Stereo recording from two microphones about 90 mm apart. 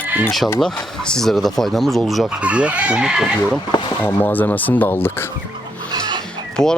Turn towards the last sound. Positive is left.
turn(degrees=5)  # may be behind; listen again after turning